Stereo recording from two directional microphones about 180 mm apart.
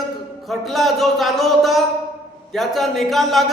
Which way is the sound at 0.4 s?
Centre (ahead or behind).